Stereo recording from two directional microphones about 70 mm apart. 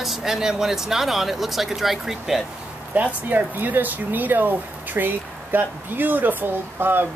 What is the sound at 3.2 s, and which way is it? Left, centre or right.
Speech, right.